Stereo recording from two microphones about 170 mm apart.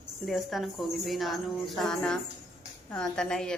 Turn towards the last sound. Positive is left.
turn(degrees=5)  # may be behind; listen again after turning